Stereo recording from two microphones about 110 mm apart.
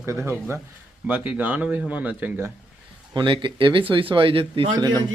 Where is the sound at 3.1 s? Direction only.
45° right (ahead or behind).